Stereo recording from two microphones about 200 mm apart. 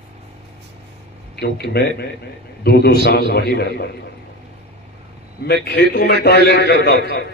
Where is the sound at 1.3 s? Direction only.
55° left (ahead or behind).